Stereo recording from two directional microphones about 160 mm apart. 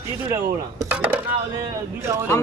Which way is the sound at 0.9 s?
10° right (ahead or behind).